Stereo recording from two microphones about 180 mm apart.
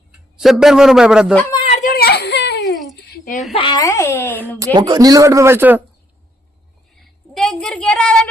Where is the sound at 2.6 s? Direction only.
Centre (ahead or behind).